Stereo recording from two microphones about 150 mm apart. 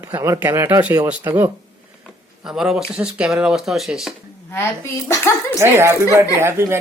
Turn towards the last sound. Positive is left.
turn(degrees=-15)  # may be behind; listen again after turning